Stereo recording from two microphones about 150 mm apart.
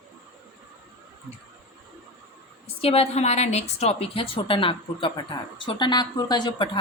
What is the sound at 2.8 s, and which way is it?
A woman's voice, 45° left (ahead or behind).